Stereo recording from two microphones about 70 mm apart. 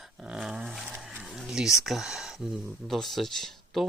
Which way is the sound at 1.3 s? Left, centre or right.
Centre.